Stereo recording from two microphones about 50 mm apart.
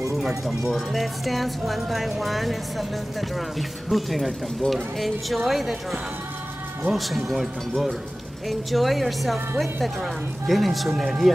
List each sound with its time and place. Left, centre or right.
0.2 s speech: centre
10.4 s speech: centre